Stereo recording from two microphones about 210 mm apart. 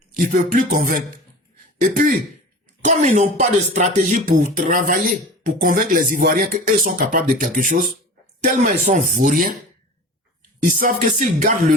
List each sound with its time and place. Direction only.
0.2 s speech: 35° right (ahead or behind)
10.7 s speech: 40° right (ahead or behind)